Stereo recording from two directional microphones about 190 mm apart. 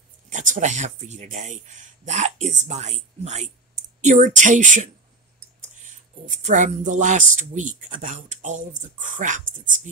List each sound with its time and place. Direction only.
0.3 s speech: 40° right (ahead or behind)
6.2 s speech: 40° right (ahead or behind)